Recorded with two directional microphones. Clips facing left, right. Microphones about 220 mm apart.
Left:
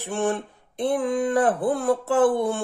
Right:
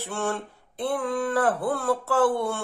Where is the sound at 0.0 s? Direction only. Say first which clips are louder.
Left 4 dB; 15° left (ahead or behind).